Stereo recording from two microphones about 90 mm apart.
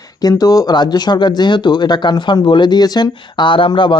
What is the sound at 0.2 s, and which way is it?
Speech, 45° left (ahead or behind).